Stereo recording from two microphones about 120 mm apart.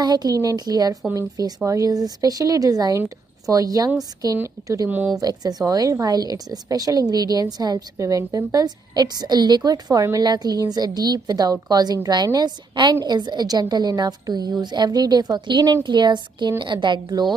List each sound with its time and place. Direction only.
0.0 s a woman's voice: 35° right (ahead or behind)
4.8 s speech: 15° right (ahead or behind)
5.1 s a woman's voice: 30° right (ahead or behind)